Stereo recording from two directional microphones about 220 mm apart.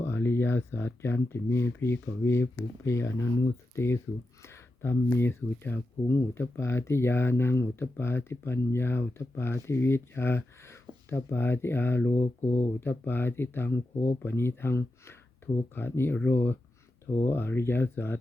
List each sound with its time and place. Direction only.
0.0 s speech: 10° left (ahead or behind)
4.4 s speech: 10° left (ahead or behind)
12.1 s speech: 30° left (ahead or behind)
12.8 s speech: 10° left (ahead or behind)